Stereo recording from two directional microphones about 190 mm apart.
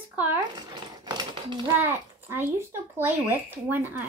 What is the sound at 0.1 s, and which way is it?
Speech, 10° right (ahead or behind).